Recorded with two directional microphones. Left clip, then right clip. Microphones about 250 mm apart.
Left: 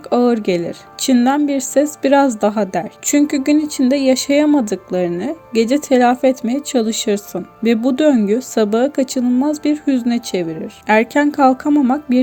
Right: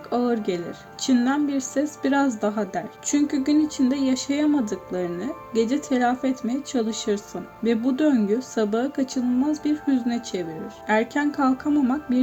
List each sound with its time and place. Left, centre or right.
0.1 s speech: left